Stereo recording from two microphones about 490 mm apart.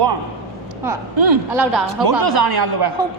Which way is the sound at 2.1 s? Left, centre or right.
Right.